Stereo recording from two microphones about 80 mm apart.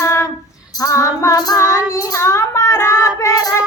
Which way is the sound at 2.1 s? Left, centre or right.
Left.